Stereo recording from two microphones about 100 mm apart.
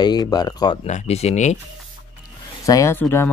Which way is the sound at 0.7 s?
90° left.